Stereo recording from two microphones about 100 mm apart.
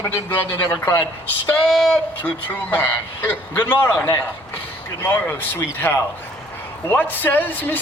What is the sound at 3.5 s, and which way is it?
A man's voice, 20° left (ahead or behind).